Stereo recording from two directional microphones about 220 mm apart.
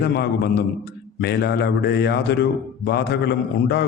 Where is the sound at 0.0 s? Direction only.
45° left (ahead or behind).